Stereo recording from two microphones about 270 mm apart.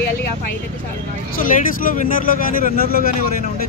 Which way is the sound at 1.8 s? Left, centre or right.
Left.